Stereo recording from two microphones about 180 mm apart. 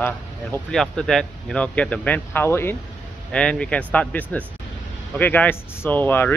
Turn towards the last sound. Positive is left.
turn(degrees=10)  # may be behind; listen again after turning